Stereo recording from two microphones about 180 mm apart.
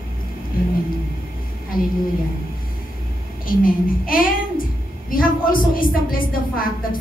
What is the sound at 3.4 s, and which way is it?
A woman's voice, 50° left (ahead or behind).